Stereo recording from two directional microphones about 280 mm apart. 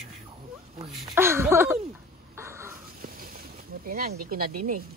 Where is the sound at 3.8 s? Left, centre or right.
Right.